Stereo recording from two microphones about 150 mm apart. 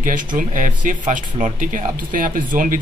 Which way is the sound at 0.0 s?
60° right (ahead or behind).